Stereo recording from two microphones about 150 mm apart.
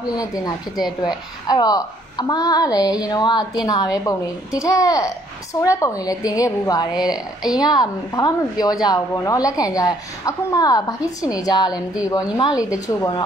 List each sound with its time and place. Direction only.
1.0 s a woman's voice: 25° left (ahead or behind)